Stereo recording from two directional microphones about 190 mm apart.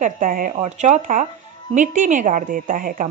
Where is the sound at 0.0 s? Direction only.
45° right (ahead or behind).